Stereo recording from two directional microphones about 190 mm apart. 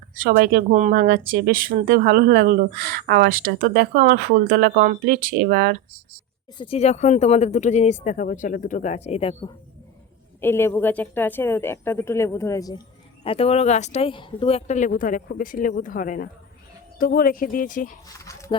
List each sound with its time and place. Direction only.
0.1 s speech: 45° right (ahead or behind)
0.7 s speech: 40° right (ahead or behind)
6.6 s speech: 30° left (ahead or behind)
10.4 s a woman's voice: 10° left (ahead or behind)
13.2 s speech: 30° left (ahead or behind)
18.2 s a sound: 15° left (ahead or behind)